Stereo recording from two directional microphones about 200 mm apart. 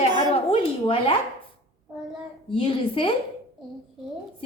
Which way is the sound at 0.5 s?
25° left (ahead or behind).